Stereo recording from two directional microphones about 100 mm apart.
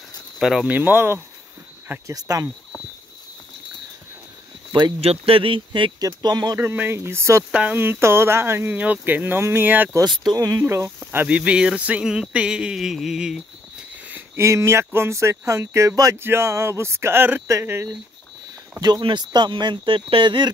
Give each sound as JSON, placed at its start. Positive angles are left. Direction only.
{"t": 0.4, "sound": "speech", "side_deg": -5}
{"t": 0.7, "sound": "speech", "side_deg": -20}
{"t": 2.0, "sound": "speech", "side_deg": -35}
{"t": 5.0, "sound": "speech", "side_deg": -80}
{"t": 5.9, "sound": "speech", "side_deg": -40}
{"t": 6.6, "sound": "speech", "side_deg": -20}
{"t": 7.5, "sound": "speech", "side_deg": -15}
{"t": 10.0, "sound": "speech", "side_deg": -45}
{"t": 10.6, "sound": "speech", "side_deg": -25}
{"t": 14.1, "sound": "speech", "side_deg": -25}
{"t": 18.8, "sound": "speech", "side_deg": -45}